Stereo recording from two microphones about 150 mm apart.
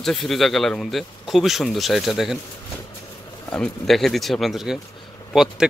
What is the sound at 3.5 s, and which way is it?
A man's voice, 5° left (ahead or behind).